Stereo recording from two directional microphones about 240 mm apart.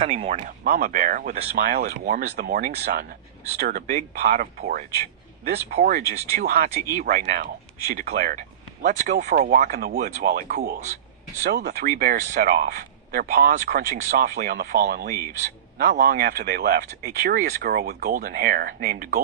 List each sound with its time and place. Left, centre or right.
0.0 s speech: right
0.6 s speech: right